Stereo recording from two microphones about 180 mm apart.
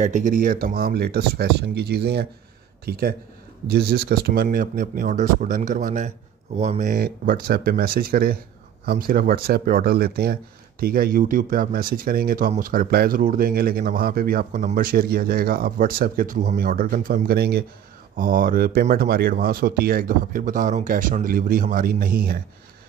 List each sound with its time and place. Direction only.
0.0 s speech: 45° right (ahead or behind); by 17.6 s 60° right (ahead or behind)
18.1 s speech: 50° right (ahead or behind)